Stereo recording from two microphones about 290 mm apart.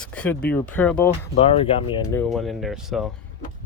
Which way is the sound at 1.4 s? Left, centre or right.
Centre.